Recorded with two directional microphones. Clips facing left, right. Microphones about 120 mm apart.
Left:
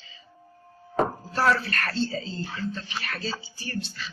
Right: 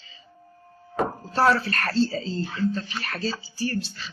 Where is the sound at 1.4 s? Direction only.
35° right (ahead or behind).